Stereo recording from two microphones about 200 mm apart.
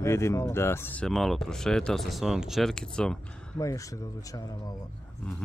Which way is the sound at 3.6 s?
15° left (ahead or behind).